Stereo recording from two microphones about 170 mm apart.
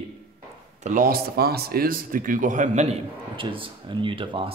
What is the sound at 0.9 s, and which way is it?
Speech, 55° right (ahead or behind).